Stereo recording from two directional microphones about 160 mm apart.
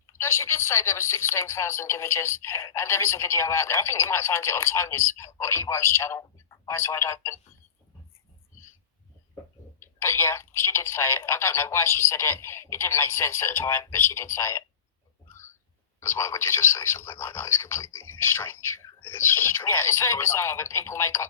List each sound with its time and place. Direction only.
0.1 s speech: 15° left (ahead or behind)
9.8 s speech: 15° left (ahead or behind)
15.3 s whispering: 15° left (ahead or behind)
16.0 s speech: 15° left (ahead or behind)